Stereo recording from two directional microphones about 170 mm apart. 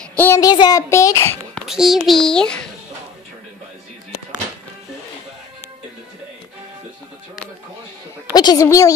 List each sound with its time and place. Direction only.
0.1 s child singing: 10° left (ahead or behind)
0.4 s a child's voice: 20° left (ahead or behind)
1.7 s a child's voice: centre (ahead or behind)
8.3 s a woman's voice: 20° left (ahead or behind)